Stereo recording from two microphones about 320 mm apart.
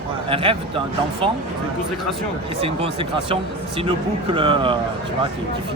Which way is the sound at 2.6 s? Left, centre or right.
Centre.